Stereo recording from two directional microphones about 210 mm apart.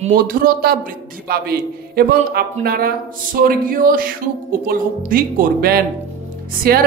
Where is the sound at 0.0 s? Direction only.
40° right (ahead or behind).